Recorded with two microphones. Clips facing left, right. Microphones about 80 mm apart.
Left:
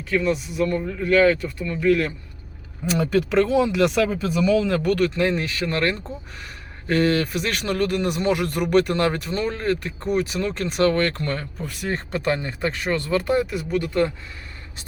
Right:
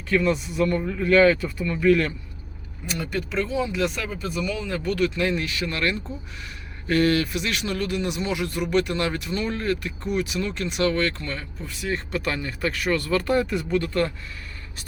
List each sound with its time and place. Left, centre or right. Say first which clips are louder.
0.1 s speech: even; centre
3.2 s speech: left 7 dB; left
4.9 s speech: left 2 dB; left; by 13.5 s centre
13.5 s speech: even; centre